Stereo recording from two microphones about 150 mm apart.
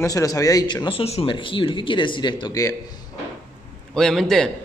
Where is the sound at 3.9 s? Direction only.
5° left (ahead or behind).